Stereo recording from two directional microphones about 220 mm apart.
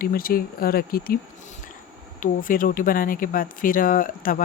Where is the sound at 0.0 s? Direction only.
40° left (ahead or behind).